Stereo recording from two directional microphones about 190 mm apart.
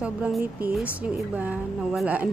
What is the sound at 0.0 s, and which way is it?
A woman's voice, 5° right (ahead or behind).